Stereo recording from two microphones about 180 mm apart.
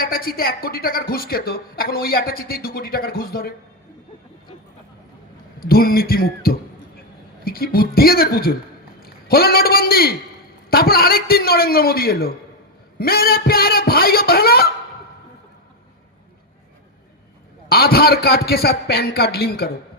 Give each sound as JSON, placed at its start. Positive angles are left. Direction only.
{"t": 0.0, "sound": "a woman's voice", "side_deg": 55}
{"t": 5.5, "sound": "a woman's voice", "side_deg": 55}
{"t": 17.7, "sound": "a woman's voice", "side_deg": 60}